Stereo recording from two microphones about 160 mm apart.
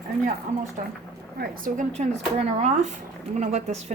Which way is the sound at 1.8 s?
45° right (ahead or behind).